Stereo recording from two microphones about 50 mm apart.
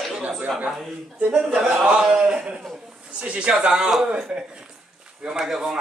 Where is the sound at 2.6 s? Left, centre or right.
Centre.